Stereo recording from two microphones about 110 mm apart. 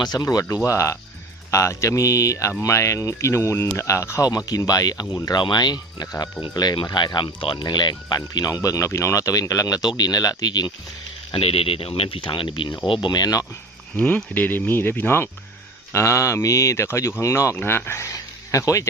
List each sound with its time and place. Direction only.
0.0 s speech: 35° left (ahead or behind)
11.3 s speech: 60° left (ahead or behind); by 13.4 s 40° left (ahead or behind)
13.9 s speech: 10° left (ahead or behind); by 18.9 s 30° left (ahead or behind)